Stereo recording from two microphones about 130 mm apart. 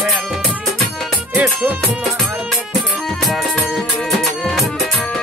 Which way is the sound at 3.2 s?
Centre (ahead or behind).